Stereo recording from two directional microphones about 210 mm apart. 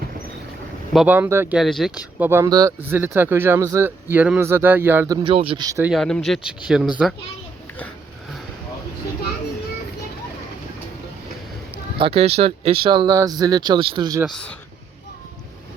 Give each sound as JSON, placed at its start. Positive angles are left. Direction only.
{"t": 0.9, "sound": "speech", "side_deg": -5}
{"t": 5.9, "sound": "speech", "side_deg": 0}
{"t": 11.9, "sound": "speech", "side_deg": -25}